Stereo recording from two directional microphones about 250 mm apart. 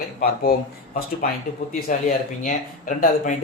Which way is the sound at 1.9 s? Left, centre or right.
Left.